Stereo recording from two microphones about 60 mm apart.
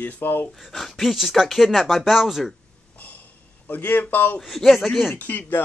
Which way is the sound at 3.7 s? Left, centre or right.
Left.